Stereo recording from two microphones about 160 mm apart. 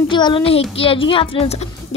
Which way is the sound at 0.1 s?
30° left (ahead or behind).